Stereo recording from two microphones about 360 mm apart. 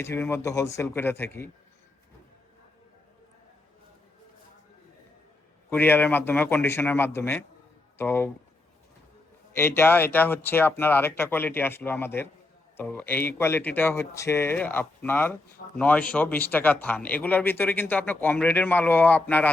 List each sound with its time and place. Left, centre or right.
0.0 s speech: centre
5.7 s speech: centre
9.6 s speech: centre